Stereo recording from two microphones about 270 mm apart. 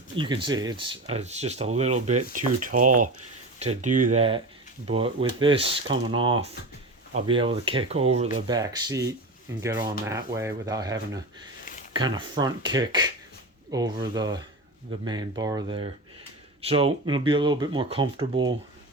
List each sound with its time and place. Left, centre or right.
0.2 s speech: centre